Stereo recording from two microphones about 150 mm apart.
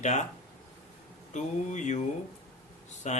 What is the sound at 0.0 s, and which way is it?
Speech, 50° left (ahead or behind).